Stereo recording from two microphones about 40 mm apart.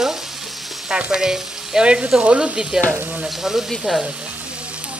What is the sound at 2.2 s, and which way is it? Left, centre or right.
Stir, right.